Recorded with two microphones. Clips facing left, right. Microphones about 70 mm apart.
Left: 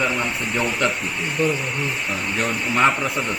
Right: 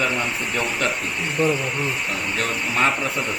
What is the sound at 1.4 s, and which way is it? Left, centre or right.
Speech, right.